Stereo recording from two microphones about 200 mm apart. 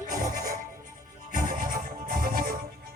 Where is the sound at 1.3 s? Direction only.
45° right (ahead or behind).